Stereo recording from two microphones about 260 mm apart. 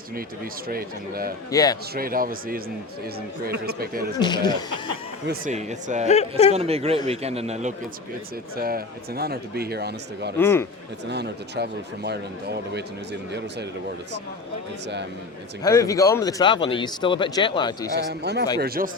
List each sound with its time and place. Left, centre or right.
0.7 s speech: right
1.5 s speech: centre
2.0 s speech: right
4.2 s speech: centre
5.5 s speech: right
6.1 s speech: left
6.5 s speech: right
8.5 s speech: right
10.3 s speech: centre
11.0 s speech: right
15.6 s speech: centre
18.1 s speech: right